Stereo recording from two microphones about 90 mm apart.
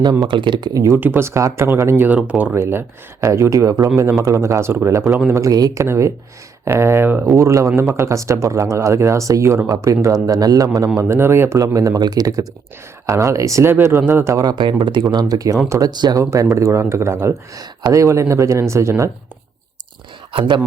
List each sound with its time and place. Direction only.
0.0 s speech: 45° right (ahead or behind)
0.3 s speech: 60° right (ahead or behind)
0.7 s speech: 35° right (ahead or behind)
0.9 s speech: 25° right (ahead or behind)
7.3 s speech: 35° right (ahead or behind)
11.1 s speech: 30° right (ahead or behind)
14.3 s speech: 50° right (ahead or behind)
16.2 s speech: 35° right (ahead or behind)
17.6 s speech: 40° right (ahead or behind)